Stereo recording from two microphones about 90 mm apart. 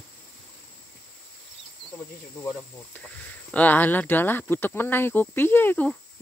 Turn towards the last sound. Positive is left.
turn(degrees=25)  # may be behind; listen again after turning